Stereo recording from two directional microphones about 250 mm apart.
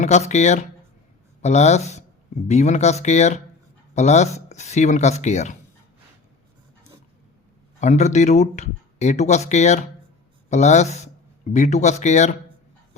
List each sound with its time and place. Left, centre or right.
0.0 s speech: left
7.8 s speech: left